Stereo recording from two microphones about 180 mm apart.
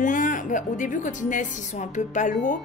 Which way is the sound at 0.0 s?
45° left (ahead or behind).